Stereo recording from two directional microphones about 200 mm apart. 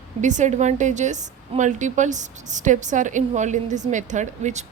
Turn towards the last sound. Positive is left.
turn(degrees=-35)  # may be behind; listen again after turning